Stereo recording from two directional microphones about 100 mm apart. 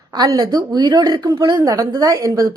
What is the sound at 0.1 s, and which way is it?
A woman's voice, 40° right (ahead or behind).